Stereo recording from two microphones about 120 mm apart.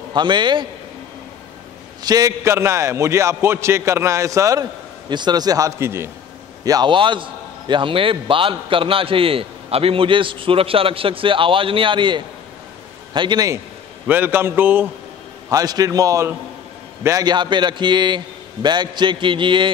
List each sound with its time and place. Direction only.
0.1 s a man's voice: 40° right (ahead or behind)
2.0 s a man's voice: 30° right (ahead or behind)
6.6 s a man's voice: 35° right (ahead or behind)
14.0 s a man's voice: 15° right (ahead or behind)
15.5 s a man's voice: 30° right (ahead or behind)